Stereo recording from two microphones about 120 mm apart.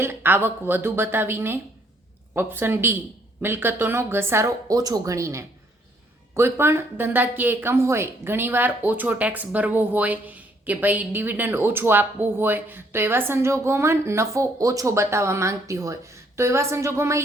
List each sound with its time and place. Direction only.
0.0 s speech: 20° right (ahead or behind)